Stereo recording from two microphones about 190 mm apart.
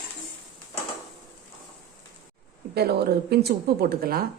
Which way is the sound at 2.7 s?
55° right (ahead or behind).